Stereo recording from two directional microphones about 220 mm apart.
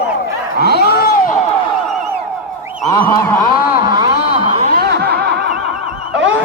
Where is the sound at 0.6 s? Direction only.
45° left (ahead or behind).